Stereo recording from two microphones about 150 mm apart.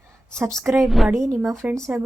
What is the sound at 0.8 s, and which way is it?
Speech, centre (ahead or behind).